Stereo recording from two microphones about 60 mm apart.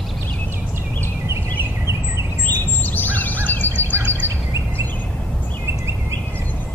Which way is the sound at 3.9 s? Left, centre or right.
Right.